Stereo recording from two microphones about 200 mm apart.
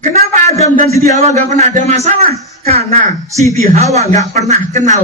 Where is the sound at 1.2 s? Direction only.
35° right (ahead or behind).